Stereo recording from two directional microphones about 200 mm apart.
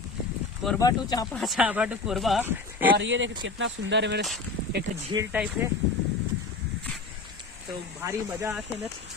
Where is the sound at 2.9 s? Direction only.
70° right (ahead or behind).